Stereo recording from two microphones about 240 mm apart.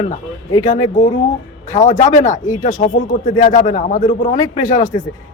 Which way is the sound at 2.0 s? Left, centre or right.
Left.